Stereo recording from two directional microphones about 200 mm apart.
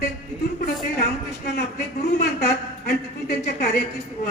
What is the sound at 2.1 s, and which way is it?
A woman's voice, 55° left (ahead or behind).